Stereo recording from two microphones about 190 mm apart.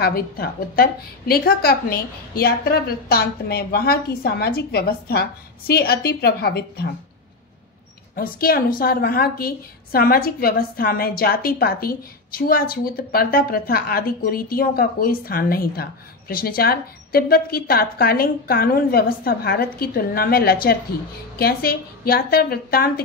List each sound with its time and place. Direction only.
0.0 s a woman's voice: 55° left (ahead or behind)
8.2 s a woman's voice: 50° left (ahead or behind)